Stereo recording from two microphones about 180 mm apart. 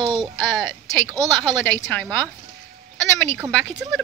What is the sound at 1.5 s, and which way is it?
Speech, 5° left (ahead or behind).